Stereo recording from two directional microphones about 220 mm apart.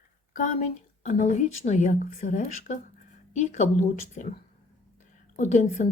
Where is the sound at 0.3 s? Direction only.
35° left (ahead or behind).